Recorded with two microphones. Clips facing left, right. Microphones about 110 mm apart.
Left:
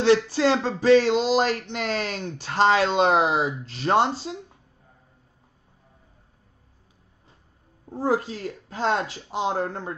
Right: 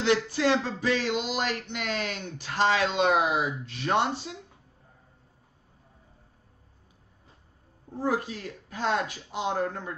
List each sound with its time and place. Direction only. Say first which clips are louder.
0.0 s speech: left 5 dB; 35° left (ahead or behind)
7.9 s speech: left 4 dB; 35° left (ahead or behind)